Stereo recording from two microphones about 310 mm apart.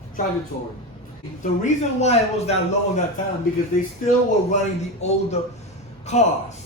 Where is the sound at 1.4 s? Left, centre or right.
Left.